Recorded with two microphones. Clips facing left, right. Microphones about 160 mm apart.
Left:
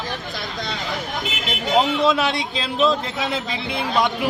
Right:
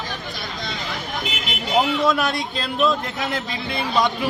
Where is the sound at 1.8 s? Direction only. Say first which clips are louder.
Even; centre (ahead or behind).